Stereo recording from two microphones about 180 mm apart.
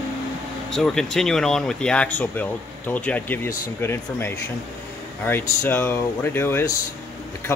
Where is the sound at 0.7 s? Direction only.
Centre (ahead or behind).